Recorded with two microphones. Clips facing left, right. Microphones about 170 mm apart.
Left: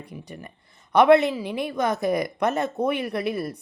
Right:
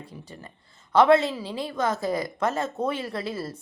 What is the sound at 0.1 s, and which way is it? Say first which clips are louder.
A woman's voice: left 4 dB; 15° left (ahead or behind).